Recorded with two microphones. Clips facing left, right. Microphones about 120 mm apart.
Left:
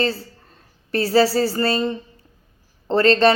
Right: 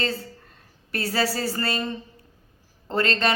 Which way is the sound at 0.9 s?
30° left (ahead or behind).